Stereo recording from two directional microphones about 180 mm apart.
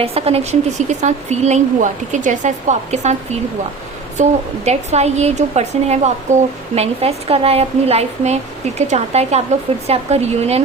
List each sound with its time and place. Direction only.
0.0 s speech: 35° right (ahead or behind)
4.2 s speech: 40° right (ahead or behind)